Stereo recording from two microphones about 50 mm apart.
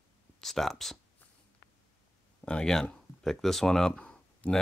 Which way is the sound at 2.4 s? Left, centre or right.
Centre.